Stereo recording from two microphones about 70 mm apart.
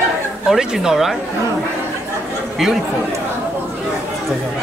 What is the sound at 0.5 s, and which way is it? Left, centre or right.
Speech, centre.